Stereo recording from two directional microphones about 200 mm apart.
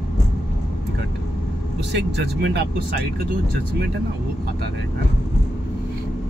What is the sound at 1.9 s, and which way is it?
Speech, 55° right (ahead or behind).